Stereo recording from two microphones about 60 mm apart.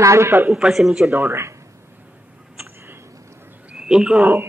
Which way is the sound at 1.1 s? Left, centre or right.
Right.